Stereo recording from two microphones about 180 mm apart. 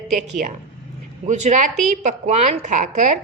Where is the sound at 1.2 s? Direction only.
40° right (ahead or behind).